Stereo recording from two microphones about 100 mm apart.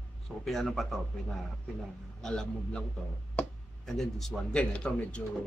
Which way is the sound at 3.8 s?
Centre (ahead or behind).